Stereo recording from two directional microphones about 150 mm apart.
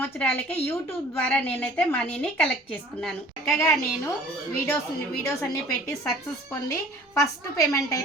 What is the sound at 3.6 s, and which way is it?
Speech, 20° left (ahead or behind).